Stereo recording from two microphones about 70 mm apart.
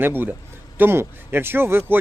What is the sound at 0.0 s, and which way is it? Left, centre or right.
Speech, right.